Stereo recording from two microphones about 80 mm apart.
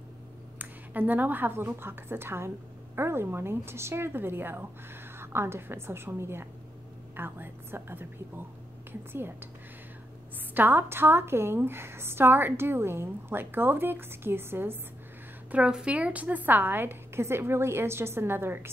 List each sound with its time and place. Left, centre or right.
0.6 s a woman's voice: right
10.5 s a woman's voice: right
15.5 s a woman's voice: centre; by 18.7 s right